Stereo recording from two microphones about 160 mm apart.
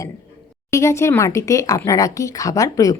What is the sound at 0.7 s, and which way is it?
A woman's voice, 20° left (ahead or behind).